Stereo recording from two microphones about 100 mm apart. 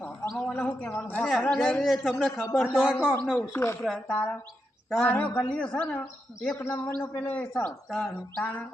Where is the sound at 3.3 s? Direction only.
25° left (ahead or behind).